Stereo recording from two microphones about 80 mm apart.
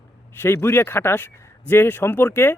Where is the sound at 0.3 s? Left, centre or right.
Left.